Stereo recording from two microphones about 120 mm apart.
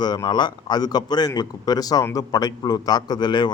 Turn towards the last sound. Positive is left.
turn(degrees=40)  # may be behind; listen again after turning